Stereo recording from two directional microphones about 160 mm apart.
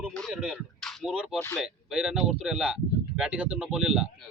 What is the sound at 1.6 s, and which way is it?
Speech, 5° right (ahead or behind).